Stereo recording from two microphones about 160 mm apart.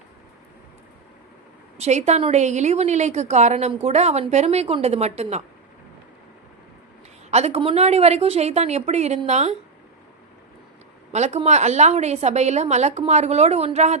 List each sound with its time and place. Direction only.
1.8 s a woman's voice: 45° right (ahead or behind)
7.3 s a woman's voice: 45° right (ahead or behind)
11.1 s a woman's voice: 45° right (ahead or behind)